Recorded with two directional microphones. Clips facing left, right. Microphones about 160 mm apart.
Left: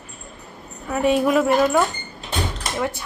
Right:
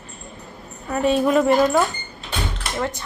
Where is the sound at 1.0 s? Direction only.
10° left (ahead or behind).